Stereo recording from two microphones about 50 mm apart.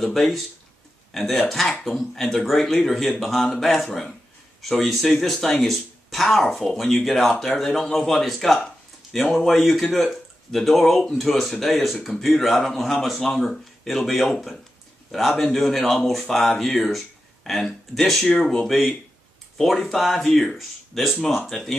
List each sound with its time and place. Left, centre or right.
1.1 s speech: centre